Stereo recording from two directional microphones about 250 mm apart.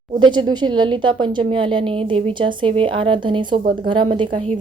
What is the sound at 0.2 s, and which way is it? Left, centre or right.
A woman's voice, centre.